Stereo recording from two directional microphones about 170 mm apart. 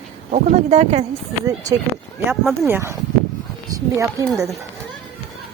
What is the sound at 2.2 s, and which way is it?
Speech, 10° right (ahead or behind).